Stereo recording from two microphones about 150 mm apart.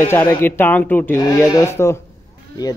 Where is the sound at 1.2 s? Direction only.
25° left (ahead or behind).